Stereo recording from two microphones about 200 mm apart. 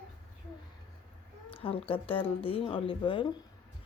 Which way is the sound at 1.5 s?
30° left (ahead or behind).